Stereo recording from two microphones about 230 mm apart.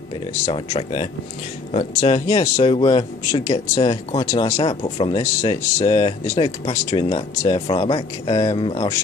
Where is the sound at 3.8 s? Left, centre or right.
Left.